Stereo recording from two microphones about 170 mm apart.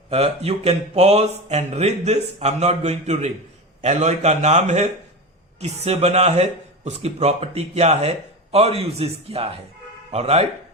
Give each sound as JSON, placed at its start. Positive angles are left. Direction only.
{"t": 0.1, "sound": "speech", "side_deg": -40}